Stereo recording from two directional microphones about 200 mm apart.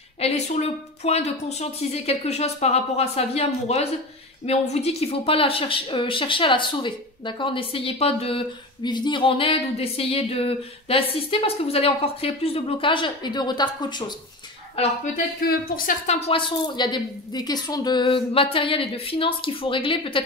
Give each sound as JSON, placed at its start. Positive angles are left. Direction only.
{"t": 0.2, "sound": "speech", "side_deg": 30}
{"t": 15.4, "sound": "speech", "side_deg": 45}